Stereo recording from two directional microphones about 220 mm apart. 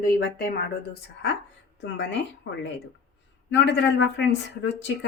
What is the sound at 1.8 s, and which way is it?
Speech, 50° left (ahead or behind).